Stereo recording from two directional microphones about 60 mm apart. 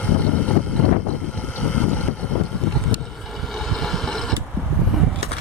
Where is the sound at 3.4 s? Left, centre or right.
Centre.